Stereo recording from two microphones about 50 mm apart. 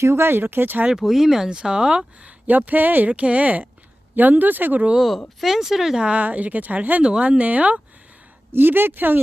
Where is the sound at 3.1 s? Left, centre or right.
Right.